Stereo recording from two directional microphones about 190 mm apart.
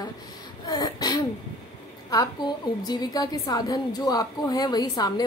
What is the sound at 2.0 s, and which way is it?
A woman's voice, 20° left (ahead or behind).